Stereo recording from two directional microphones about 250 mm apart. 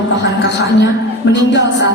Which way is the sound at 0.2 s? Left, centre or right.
Left.